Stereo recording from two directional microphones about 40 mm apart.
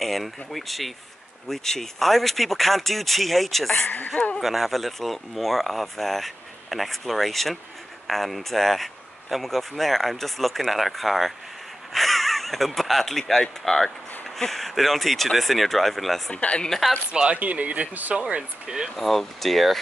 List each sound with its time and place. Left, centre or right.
0.0 s speech: centre
4.1 s speech: left
4.4 s speech: centre
16.3 s speech: left
16.6 s speech: centre
17.1 s speech: right
17.4 s speech: right
18.1 s speech: right
18.9 s speech: centre